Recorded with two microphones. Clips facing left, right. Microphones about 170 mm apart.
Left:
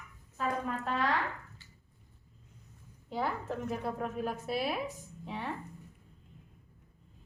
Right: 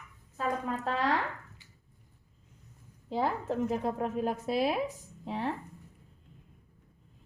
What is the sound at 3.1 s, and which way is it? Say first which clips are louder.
A woman's voice: right 4 dB; 35° right (ahead or behind).